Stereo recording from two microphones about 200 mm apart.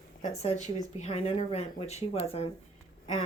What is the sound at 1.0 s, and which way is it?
Speech, 30° left (ahead or behind).